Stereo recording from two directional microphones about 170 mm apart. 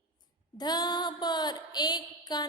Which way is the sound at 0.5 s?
25° left (ahead or behind).